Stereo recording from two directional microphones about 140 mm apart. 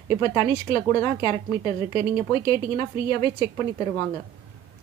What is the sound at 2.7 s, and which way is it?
A woman's voice, 35° left (ahead or behind).